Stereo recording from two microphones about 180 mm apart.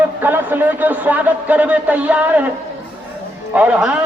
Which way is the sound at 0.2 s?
10° right (ahead or behind).